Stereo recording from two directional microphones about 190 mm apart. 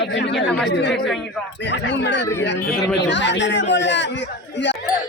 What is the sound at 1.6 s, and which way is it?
A man's voice, 70° left (ahead or behind).